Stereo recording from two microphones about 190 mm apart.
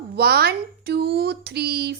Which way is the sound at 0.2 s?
55° right (ahead or behind).